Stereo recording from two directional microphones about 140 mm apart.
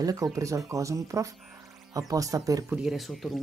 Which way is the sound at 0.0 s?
25° right (ahead or behind).